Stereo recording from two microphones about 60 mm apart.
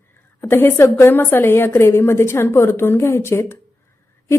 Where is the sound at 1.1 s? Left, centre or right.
Left.